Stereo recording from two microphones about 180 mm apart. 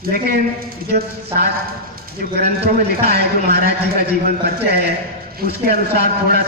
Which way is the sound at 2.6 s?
60° right (ahead or behind).